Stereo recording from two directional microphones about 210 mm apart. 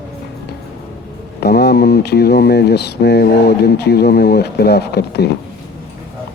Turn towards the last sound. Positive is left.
turn(degrees=50)  # may be behind; listen again after turning